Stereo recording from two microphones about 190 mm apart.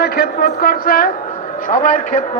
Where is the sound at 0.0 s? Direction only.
55° left (ahead or behind).